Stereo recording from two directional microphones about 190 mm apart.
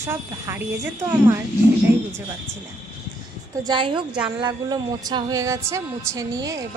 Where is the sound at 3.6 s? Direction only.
25° right (ahead or behind).